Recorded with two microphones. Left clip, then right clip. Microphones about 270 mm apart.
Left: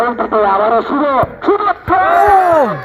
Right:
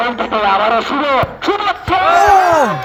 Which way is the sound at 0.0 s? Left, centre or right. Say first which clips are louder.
Left 2 dB; right.